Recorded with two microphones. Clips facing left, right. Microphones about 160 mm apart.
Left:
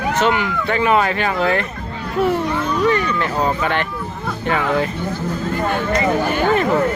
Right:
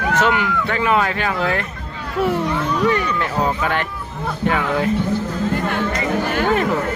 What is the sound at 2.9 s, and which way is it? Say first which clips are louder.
Speech: left 1 dB; 5° right (ahead or behind).